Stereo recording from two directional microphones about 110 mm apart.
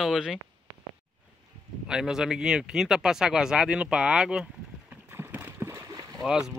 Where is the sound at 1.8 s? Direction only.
5° right (ahead or behind).